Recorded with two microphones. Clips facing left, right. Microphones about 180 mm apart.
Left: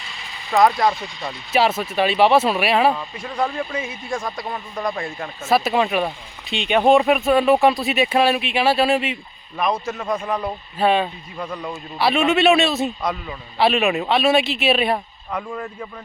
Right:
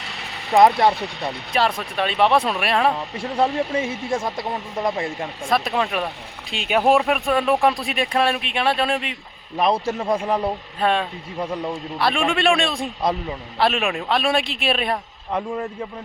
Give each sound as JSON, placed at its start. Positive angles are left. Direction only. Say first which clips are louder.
{"t": 0.0, "sound": "a sound", "louder": "right 3 dB", "side_deg": -65}
{"t": 0.5, "sound": "speech", "louder": "right 2 dB", "side_deg": -20}
{"t": 0.9, "sound": "speech", "louder": "right 3 dB", "side_deg": -65}
{"t": 1.5, "sound": "speech", "louder": "left 4 dB", "side_deg": 5}
{"t": 3.5, "sound": "speech", "louder": "right 4 dB", "side_deg": -75}
{"t": 3.8, "sound": "speech", "louder": "right 4 dB", "side_deg": -25}
{"t": 5.5, "sound": "speech", "louder": "left 4 dB", "side_deg": 5}
{"t": 9.6, "sound": "a man's voice", "louder": "right 3 dB", "side_deg": -30}
{"t": 10.8, "sound": "speech", "louder": "left 4 dB", "side_deg": 5}
{"t": 11.3, "sound": "speech", "louder": "right 3 dB", "side_deg": -25}
{"t": 11.9, "sound": "speech", "louder": "left 4 dB", "side_deg": 5}
{"t": 15.3, "sound": "speech", "louder": "right 3 dB", "side_deg": -25}